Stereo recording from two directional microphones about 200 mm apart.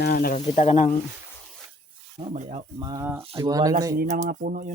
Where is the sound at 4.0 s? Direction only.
40° right (ahead or behind).